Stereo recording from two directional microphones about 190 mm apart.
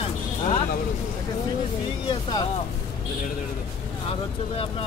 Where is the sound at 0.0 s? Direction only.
30° left (ahead or behind).